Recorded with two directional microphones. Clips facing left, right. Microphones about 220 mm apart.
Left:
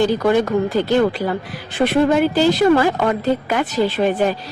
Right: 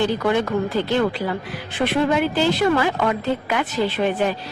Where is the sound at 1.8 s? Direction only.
40° left (ahead or behind).